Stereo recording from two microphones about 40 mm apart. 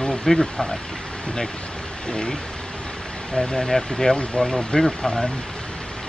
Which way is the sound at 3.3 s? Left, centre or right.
Centre.